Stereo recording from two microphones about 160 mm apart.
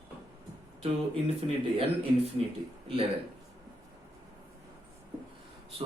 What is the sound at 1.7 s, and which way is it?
Speech, 40° right (ahead or behind).